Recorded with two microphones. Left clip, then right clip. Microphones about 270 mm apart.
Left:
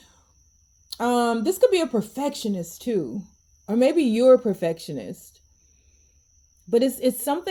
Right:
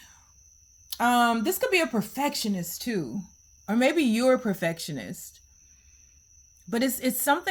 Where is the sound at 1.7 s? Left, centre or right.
Right.